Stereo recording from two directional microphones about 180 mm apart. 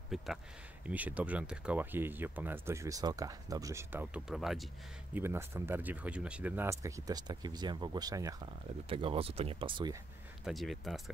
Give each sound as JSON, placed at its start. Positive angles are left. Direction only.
{"t": 0.1, "sound": "speech", "side_deg": 0}
{"t": 5.1, "sound": "speech", "side_deg": -15}
{"t": 8.8, "sound": "speech", "side_deg": -30}
{"t": 10.4, "sound": "speech", "side_deg": 0}